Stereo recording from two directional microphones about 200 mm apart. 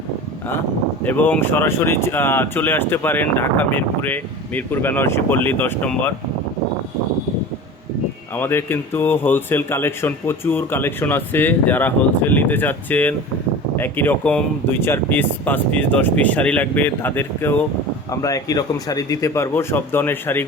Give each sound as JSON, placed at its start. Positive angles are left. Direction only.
{"t": 1.0, "sound": "speech", "side_deg": 10}
{"t": 8.4, "sound": "speech", "side_deg": 10}